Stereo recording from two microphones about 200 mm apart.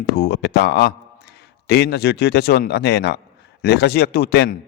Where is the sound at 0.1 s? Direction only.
55° left (ahead or behind).